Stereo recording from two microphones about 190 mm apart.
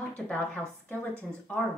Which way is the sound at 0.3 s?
10° left (ahead or behind).